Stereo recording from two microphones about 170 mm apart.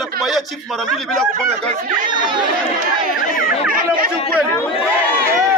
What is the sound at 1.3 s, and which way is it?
Speech, 50° right (ahead or behind).